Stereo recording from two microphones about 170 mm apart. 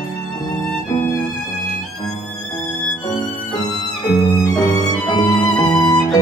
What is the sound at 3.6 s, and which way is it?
Violin, 20° left (ahead or behind).